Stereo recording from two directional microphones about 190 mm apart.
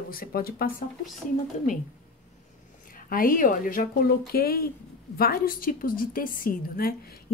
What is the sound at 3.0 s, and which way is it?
A woman's voice, 45° left (ahead or behind).